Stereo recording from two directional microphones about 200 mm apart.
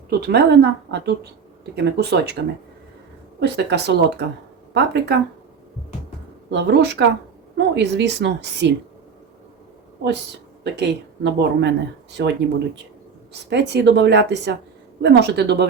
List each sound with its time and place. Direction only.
0.1 s speech: 55° right (ahead or behind)
3.4 s speech: 60° right (ahead or behind)
6.5 s speech: 60° right (ahead or behind)
10.6 s speech: 55° right (ahead or behind)